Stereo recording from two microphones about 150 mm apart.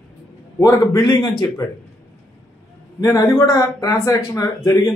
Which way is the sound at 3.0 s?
20° left (ahead or behind).